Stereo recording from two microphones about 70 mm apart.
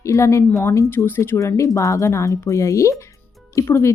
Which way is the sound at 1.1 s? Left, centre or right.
Left.